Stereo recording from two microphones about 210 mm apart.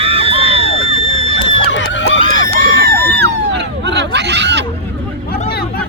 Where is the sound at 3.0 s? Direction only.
55° right (ahead or behind).